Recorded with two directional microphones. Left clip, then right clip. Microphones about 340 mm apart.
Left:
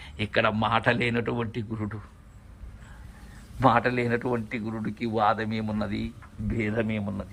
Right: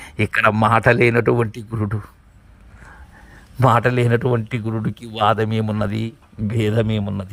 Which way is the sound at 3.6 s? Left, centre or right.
Right.